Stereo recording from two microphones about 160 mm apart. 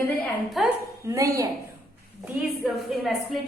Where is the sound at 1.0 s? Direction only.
20° right (ahead or behind).